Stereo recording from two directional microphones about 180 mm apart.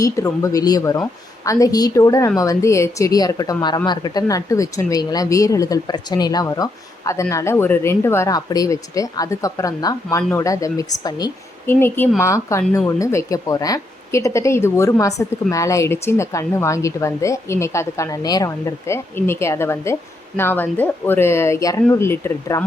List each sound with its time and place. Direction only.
0.4 s a woman's voice: 20° left (ahead or behind)